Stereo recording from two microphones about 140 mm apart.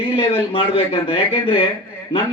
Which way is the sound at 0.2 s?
40° left (ahead or behind).